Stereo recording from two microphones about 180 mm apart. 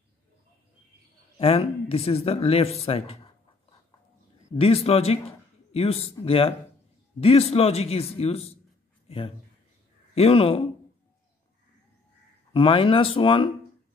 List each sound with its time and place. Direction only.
1.4 s speech: 35° left (ahead or behind)
4.6 s speech: 35° left (ahead or behind)
12.5 s speech: 30° left (ahead or behind)